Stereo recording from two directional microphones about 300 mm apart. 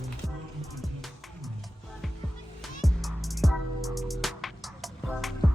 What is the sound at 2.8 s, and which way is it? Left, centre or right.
Music, centre.